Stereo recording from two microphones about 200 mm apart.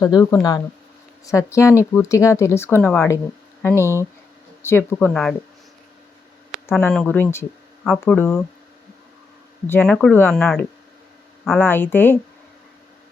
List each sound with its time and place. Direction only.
0.0 s speech: 15° left (ahead or behind)
6.7 s speech: 5° left (ahead or behind)
9.6 s speech: 5° left (ahead or behind)